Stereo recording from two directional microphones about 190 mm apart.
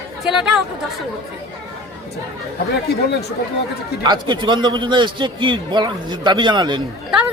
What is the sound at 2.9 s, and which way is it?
Speech, 60° left (ahead or behind).